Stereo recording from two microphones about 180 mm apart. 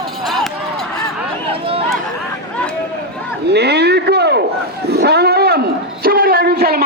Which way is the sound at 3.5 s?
65° right (ahead or behind).